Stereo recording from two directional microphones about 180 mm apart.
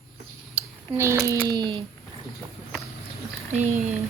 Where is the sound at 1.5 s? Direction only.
25° right (ahead or behind).